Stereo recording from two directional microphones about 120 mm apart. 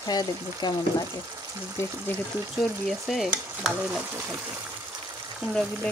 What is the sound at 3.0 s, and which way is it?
Stir, centre (ahead or behind).